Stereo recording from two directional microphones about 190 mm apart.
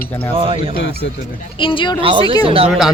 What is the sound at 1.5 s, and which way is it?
Speech, 25° left (ahead or behind).